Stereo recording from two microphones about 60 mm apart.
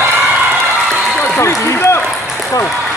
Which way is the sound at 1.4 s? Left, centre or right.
Left.